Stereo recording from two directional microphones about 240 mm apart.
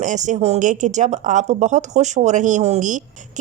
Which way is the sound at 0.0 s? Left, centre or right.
Right.